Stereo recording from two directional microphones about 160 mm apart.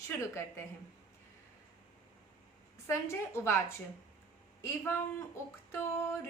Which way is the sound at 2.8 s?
15° left (ahead or behind).